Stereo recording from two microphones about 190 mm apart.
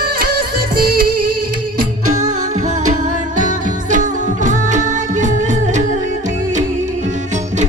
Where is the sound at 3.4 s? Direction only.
40° right (ahead or behind).